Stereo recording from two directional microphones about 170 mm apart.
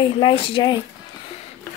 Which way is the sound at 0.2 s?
30° left (ahead or behind).